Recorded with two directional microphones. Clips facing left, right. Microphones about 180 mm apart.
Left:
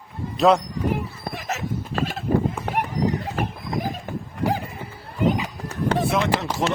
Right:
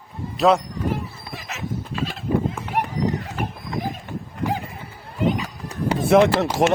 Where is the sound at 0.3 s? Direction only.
Centre (ahead or behind).